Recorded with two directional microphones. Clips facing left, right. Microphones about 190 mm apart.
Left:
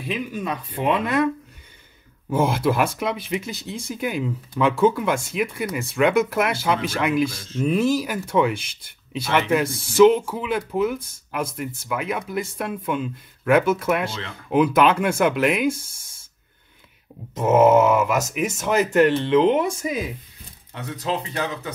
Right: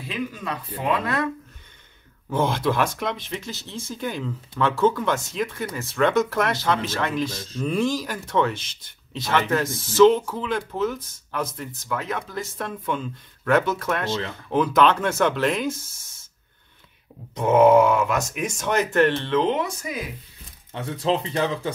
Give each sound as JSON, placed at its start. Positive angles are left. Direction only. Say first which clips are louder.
{"t": 0.1, "sound": "speech", "louder": "left 3 dB", "side_deg": 20}
{"t": 2.2, "sound": "speech", "louder": "left 2 dB", "side_deg": 10}
{"t": 17.3, "sound": "speech", "louder": "even", "side_deg": 5}
{"t": 19.6, "sound": "speech", "louder": "left 5 dB", "side_deg": 25}
{"t": 20.7, "sound": "speech", "louder": "right 3 dB", "side_deg": -30}